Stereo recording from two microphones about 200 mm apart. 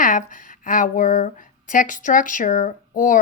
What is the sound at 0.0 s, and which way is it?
Speech, 40° left (ahead or behind).